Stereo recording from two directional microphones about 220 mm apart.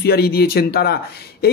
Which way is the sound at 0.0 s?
45° left (ahead or behind).